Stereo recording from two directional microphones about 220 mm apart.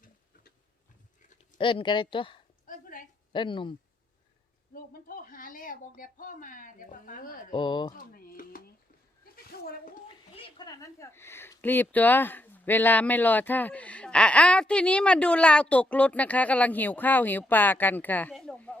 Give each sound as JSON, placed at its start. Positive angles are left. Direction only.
{"t": 1.3, "sound": "speech", "side_deg": 25}
{"t": 2.6, "sound": "dog", "side_deg": 40}
{"t": 3.3, "sound": "speech", "side_deg": 20}
{"t": 4.7, "sound": "speech", "side_deg": 40}
{"t": 7.5, "sound": "speech", "side_deg": 20}
{"t": 7.9, "sound": "a sound", "side_deg": 40}
{"t": 10.3, "sound": "speech", "side_deg": 20}